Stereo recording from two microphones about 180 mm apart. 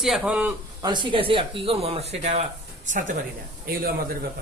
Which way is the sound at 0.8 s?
25° right (ahead or behind).